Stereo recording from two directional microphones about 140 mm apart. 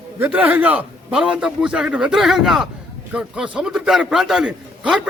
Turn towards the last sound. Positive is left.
turn(degrees=-5)  # may be behind; listen again after turning